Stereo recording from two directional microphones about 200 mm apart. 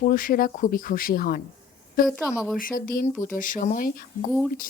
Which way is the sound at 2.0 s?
5° right (ahead or behind).